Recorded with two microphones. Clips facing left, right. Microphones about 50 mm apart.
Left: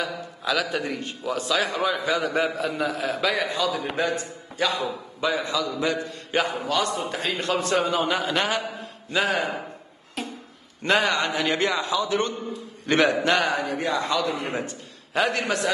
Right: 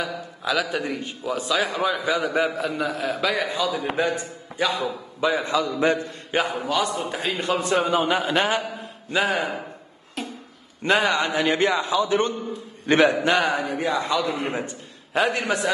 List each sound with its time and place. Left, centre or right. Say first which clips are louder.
0.0 s a man's voice: right 1 dB; centre
5.3 s a man's voice: right 2 dB; right
6.3 s a man's voice: right 1 dB; centre
9.1 s a man's voice: right 1 dB; centre
10.2 s a sound: even; centre
10.8 s a man's voice: right 1 dB; centre
11.5 s a man's voice: right 3 dB; right
14.2 s a man's voice: right 1 dB; right
15.1 s a man's voice: right 1 dB; centre